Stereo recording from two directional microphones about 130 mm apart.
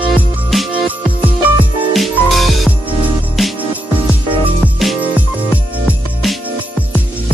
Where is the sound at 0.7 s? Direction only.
10° right (ahead or behind).